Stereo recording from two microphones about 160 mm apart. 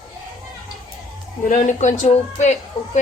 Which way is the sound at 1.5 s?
50° left (ahead or behind).